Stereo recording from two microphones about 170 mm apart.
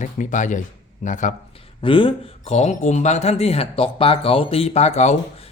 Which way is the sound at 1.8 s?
30° left (ahead or behind).